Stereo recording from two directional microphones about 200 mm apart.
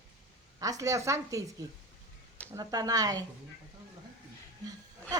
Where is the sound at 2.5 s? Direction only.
20° right (ahead or behind).